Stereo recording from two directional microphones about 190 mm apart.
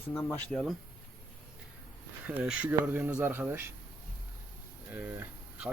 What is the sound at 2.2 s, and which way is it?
Speech, 5° right (ahead or behind).